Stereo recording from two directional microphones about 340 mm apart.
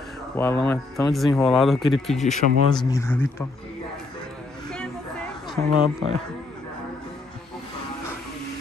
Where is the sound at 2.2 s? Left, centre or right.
Left.